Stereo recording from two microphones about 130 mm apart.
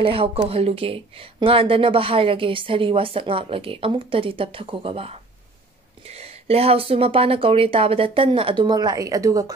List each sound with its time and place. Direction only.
0.0 s speech: 45° right (ahead or behind); by 9.5 s 25° right (ahead or behind)